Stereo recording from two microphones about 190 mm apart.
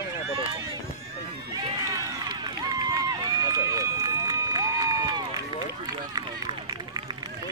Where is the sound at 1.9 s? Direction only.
20° right (ahead or behind).